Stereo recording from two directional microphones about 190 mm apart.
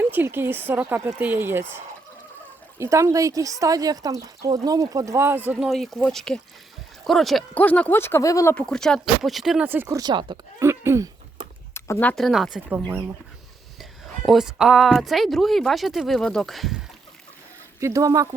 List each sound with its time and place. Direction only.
0.0 s speech: 10° right (ahead or behind)
5.6 s speech: centre (ahead or behind); by 10.3 s 25° right (ahead or behind)
10.6 s speech: 15° right (ahead or behind)
11.7 s speech: 10° left (ahead or behind); by 13.1 s 10° right (ahead or behind)
14.3 s speech: 5° right (ahead or behind)
17.7 s speech: 15° right (ahead or behind)